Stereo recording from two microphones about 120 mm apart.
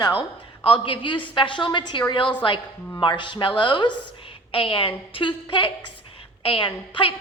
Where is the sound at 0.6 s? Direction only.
45° left (ahead or behind).